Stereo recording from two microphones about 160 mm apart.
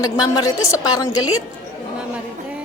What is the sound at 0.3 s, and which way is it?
Speech, 20° left (ahead or behind).